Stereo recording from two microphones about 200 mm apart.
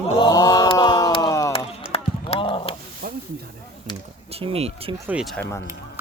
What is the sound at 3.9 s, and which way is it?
Speech, 35° right (ahead or behind).